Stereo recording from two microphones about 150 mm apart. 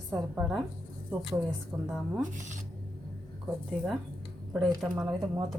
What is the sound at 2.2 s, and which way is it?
Speech, 55° right (ahead or behind).